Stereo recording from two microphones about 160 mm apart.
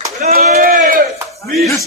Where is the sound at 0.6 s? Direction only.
60° right (ahead or behind).